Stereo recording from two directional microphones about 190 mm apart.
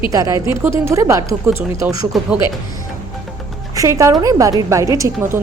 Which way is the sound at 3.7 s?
15° right (ahead or behind).